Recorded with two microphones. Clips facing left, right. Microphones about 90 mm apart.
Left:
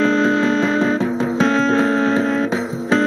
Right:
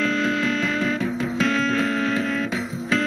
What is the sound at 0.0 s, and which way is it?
Music, 30° left (ahead or behind).